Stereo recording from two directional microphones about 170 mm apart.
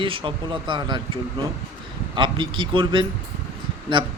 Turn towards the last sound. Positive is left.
turn(degrees=-30)  # may be behind; listen again after turning